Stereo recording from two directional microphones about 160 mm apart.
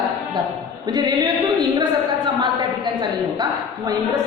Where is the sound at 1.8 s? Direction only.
30° right (ahead or behind).